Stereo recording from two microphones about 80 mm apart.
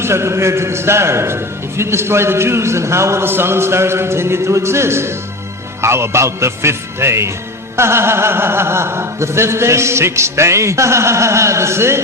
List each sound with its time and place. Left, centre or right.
0.0 s a man's voice: right